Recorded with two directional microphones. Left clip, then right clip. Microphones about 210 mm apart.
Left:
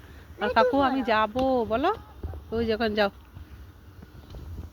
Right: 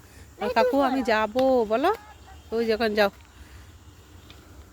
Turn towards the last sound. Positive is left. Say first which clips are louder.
# right 3 dB
turn(degrees=-10)  # may be behind; listen again after turning